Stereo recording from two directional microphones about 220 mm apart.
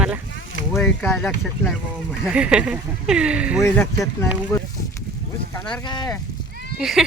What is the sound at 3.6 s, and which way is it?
Speech, 15° left (ahead or behind).